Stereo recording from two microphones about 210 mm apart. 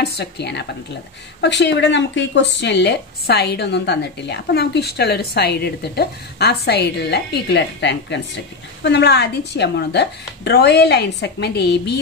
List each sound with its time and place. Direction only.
0.0 s speech: 50° left (ahead or behind)